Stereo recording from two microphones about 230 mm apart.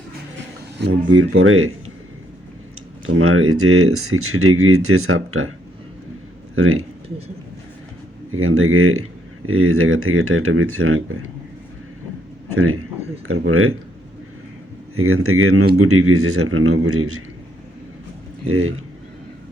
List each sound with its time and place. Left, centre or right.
0.8 s speech: right
3.2 s speech: right
6.6 s speech: right
8.3 s speech: right
12.5 s speech: right
14.9 s speech: right
18.4 s speech: right